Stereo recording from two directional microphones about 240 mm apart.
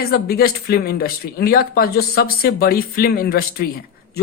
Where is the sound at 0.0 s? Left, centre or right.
Left.